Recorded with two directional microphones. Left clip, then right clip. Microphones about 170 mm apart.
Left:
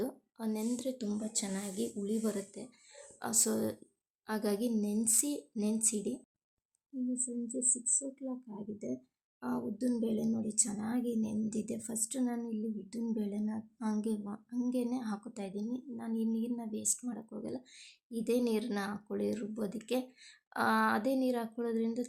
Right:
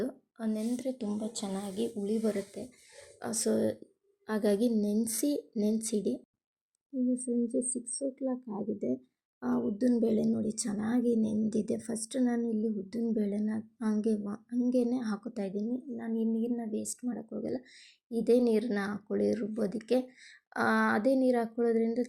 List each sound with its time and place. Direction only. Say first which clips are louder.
0.0 s a woman's voice: right 2 dB; 10° right (ahead or behind)
7.1 s speech: right 8 dB; 25° right (ahead or behind)